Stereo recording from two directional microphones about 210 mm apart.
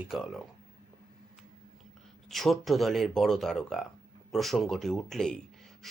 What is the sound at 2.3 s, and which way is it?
A man's voice, centre (ahead or behind).